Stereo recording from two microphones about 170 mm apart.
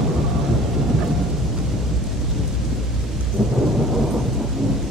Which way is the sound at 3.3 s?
Centre (ahead or behind).